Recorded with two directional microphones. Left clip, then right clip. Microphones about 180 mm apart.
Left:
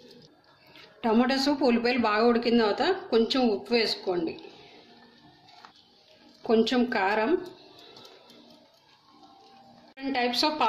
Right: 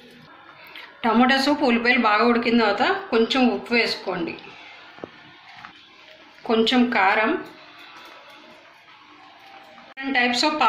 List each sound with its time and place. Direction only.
0.7 s a woman's voice: 50° left (ahead or behind)
6.4 s a woman's voice: 55° left (ahead or behind)
9.9 s a woman's voice: 55° left (ahead or behind)